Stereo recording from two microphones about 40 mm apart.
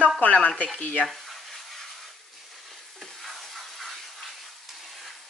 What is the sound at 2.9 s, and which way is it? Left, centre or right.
Stir, centre.